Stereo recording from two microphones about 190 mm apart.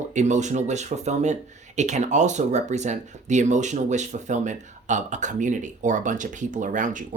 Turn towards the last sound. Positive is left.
turn(degrees=-40)  # may be behind; listen again after turning